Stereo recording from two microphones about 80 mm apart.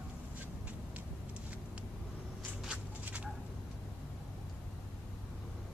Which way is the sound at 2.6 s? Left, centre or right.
Centre.